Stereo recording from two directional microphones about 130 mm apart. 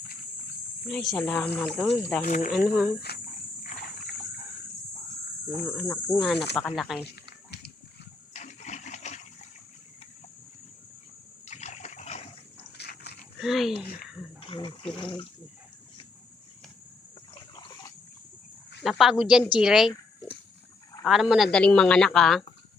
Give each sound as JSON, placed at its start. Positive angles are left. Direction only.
{"t": 0.9, "sound": "speech", "side_deg": 5}
{"t": 1.8, "sound": "speech", "side_deg": 0}
{"t": 2.2, "sound": "speech", "side_deg": 85}
{"t": 2.5, "sound": "speech", "side_deg": -5}
{"t": 5.5, "sound": "speech", "side_deg": 0}
{"t": 8.3, "sound": "water", "side_deg": 65}
{"t": 11.4, "sound": "splash", "side_deg": 60}
{"t": 13.4, "sound": "speech", "side_deg": 0}
{"t": 14.4, "sound": "speech", "side_deg": 45}
{"t": 18.8, "sound": "speech", "side_deg": 0}
{"t": 21.0, "sound": "speech", "side_deg": 0}